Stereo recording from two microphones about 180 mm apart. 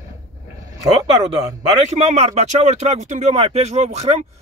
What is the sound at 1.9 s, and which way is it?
Speech, 35° right (ahead or behind).